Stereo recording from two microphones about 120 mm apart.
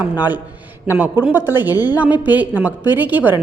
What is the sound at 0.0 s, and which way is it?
A woman's voice, 15° right (ahead or behind).